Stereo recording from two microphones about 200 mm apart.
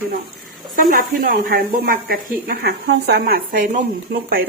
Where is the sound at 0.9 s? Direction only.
45° right (ahead or behind).